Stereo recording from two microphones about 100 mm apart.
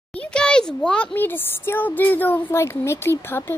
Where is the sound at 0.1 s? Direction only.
10° left (ahead or behind).